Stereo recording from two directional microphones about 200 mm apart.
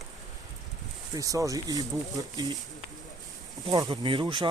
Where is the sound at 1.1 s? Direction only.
15° right (ahead or behind).